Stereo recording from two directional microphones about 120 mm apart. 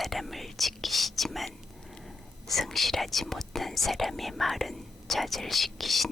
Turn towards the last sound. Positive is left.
turn(degrees=0)  # may be behind; listen again after turning